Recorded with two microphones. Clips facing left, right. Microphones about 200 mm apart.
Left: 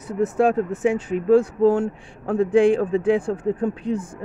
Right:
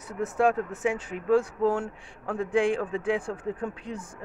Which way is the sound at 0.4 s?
30° left (ahead or behind).